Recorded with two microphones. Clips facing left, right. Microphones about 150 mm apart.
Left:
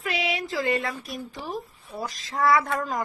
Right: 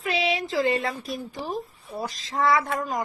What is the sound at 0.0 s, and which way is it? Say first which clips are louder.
Speech: right 3 dB; 30° right (ahead or behind).